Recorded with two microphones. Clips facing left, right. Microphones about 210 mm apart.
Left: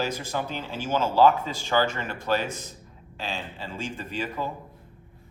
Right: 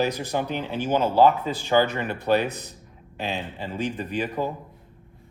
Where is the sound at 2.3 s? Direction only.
60° right (ahead or behind).